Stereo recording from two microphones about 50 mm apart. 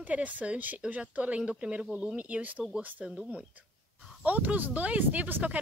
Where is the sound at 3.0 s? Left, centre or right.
Centre.